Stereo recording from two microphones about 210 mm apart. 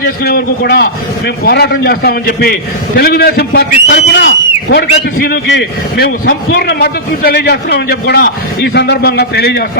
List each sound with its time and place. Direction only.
0.0 s a man's voice: 50° left (ahead or behind)